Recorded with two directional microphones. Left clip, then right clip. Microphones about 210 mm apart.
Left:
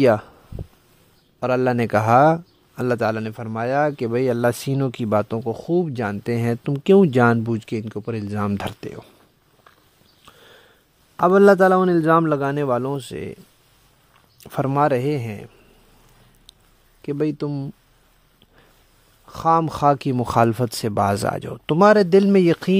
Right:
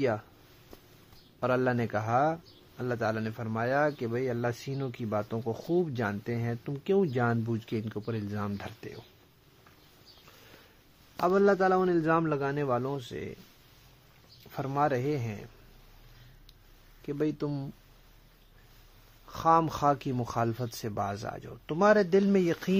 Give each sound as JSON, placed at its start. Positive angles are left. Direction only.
{"t": 0.0, "sound": "speech", "side_deg": 55}
{"t": 1.4, "sound": "speech", "side_deg": 40}
{"t": 5.4, "sound": "speech", "side_deg": 35}
{"t": 11.1, "sound": "speech", "side_deg": 50}
{"t": 14.4, "sound": "speech", "side_deg": 50}
{"t": 17.0, "sound": "speech", "side_deg": 45}
{"t": 19.2, "sound": "speech", "side_deg": 40}